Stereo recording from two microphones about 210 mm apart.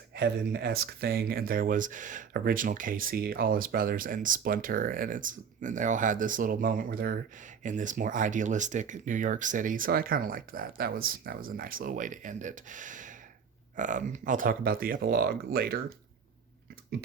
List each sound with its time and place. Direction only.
0.1 s speech: 50° right (ahead or behind)